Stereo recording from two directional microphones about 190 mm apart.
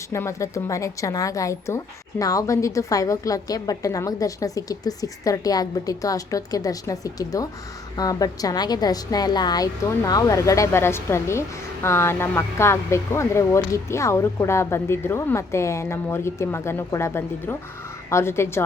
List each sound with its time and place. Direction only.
0.1 s a woman's voice: 15° left (ahead or behind)